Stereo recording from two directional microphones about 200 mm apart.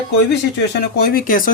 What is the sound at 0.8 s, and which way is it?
Speech, 50° left (ahead or behind).